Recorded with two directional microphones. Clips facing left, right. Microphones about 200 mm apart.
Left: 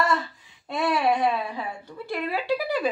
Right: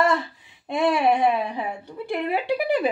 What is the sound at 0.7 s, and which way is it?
A woman's voice, 15° right (ahead or behind).